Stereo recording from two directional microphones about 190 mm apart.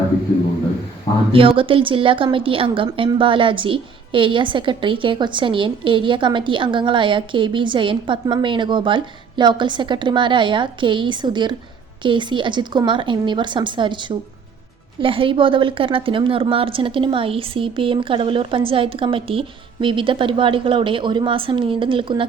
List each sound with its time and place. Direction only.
1.3 s a woman's voice: 30° right (ahead or behind)